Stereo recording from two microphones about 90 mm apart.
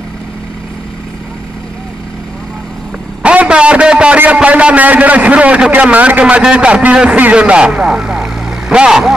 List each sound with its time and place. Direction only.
3.2 s a man's voice: 10° right (ahead or behind)